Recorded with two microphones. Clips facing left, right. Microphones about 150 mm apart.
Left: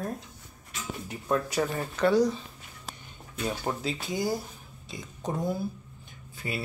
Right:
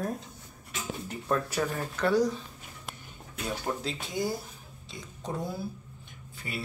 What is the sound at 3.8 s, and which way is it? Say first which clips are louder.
Speech: left 2 dB; 5° left (ahead or behind).